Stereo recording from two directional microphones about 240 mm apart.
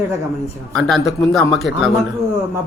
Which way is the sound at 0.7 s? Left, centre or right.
Centre.